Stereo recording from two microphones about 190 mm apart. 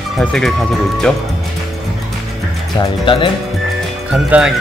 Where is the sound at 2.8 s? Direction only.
25° left (ahead or behind).